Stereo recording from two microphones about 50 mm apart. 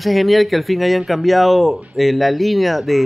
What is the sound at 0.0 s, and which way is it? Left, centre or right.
Speech, centre.